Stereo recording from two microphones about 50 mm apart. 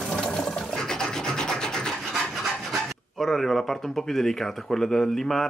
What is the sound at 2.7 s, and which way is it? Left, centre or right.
Speech, centre.